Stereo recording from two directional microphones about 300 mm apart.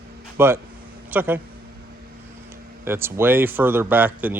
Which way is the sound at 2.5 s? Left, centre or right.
Centre.